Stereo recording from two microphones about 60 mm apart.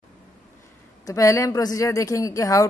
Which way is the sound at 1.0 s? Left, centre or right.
Left.